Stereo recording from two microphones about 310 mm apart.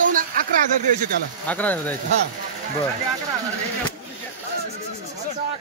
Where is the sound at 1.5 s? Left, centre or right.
Centre.